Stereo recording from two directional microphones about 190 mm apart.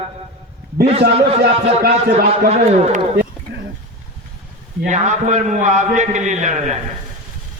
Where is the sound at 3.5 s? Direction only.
65° right (ahead or behind).